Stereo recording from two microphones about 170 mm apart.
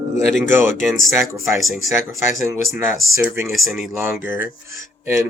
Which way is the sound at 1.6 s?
Centre (ahead or behind).